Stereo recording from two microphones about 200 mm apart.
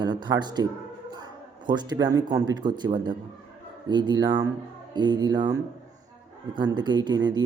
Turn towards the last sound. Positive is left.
turn(degrees=-20)  # may be behind; listen again after turning